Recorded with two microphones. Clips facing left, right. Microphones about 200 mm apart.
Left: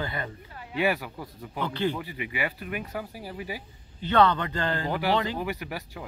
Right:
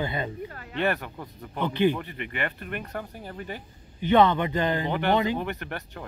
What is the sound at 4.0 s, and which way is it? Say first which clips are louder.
Speech: right 2 dB; 15° right (ahead or behind).